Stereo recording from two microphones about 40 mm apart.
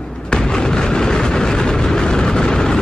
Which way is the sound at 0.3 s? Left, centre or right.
Centre.